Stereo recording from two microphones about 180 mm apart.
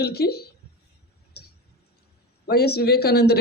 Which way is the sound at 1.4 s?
60° left (ahead or behind).